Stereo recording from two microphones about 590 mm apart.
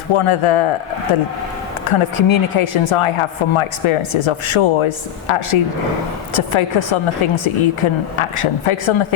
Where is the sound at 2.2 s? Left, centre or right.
Left.